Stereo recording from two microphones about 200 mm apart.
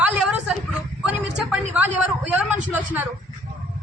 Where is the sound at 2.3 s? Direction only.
10° right (ahead or behind).